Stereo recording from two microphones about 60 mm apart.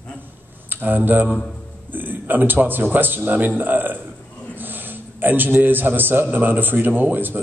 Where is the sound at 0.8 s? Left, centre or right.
Right.